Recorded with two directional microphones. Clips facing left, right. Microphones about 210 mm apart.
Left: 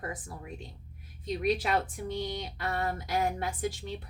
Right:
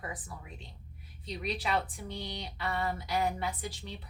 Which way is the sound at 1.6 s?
45° left (ahead or behind).